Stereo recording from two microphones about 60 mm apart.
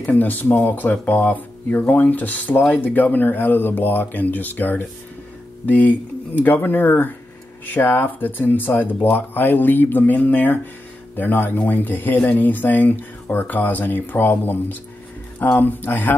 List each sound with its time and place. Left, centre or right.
0.0 s speech: left